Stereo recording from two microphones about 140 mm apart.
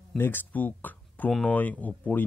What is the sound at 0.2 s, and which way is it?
Speech, 15° left (ahead or behind).